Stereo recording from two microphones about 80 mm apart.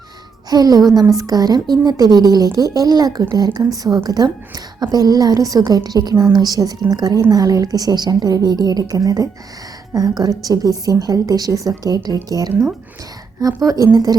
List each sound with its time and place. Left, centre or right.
0.5 s a woman's voice: right